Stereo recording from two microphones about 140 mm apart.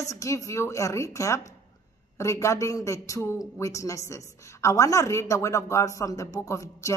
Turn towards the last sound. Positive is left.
turn(degrees=20)  # may be behind; listen again after turning